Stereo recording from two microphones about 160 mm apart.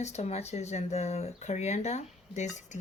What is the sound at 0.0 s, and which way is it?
Speech, 45° left (ahead or behind).